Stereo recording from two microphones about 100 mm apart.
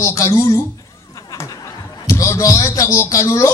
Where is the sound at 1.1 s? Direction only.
35° left (ahead or behind).